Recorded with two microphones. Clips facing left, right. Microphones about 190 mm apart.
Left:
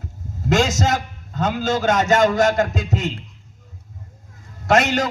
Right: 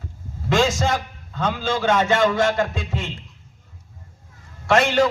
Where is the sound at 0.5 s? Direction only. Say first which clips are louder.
Left 1 dB; 40° left (ahead or behind).